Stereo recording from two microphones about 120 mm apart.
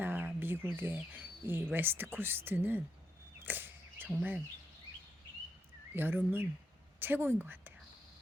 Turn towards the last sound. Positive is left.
turn(degrees=-15)  # may be behind; listen again after turning